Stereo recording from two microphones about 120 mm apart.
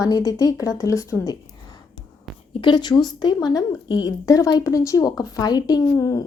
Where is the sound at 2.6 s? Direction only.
35° left (ahead or behind).